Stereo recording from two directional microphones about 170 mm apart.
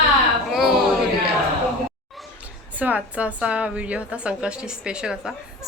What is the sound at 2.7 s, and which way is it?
A woman's voice, 10° right (ahead or behind).